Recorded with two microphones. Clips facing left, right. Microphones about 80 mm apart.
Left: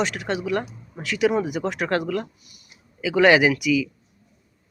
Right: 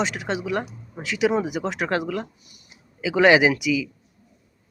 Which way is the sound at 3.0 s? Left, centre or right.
Centre.